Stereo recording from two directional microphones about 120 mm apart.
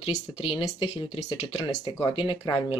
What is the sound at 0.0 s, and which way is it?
Speech, 55° left (ahead or behind).